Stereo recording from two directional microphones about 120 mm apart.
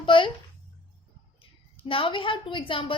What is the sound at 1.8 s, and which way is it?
A child's voice, 50° left (ahead or behind).